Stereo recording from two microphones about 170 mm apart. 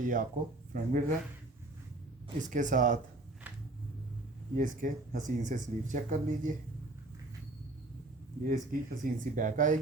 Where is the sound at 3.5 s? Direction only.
10° right (ahead or behind).